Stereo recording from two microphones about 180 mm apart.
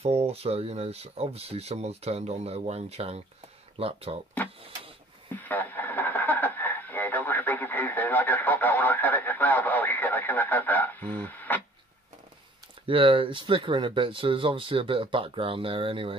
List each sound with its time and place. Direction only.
0.0 s speech: 35° right (ahead or behind)
5.3 s radio: 10° left (ahead or behind)
12.8 s speech: 30° right (ahead or behind)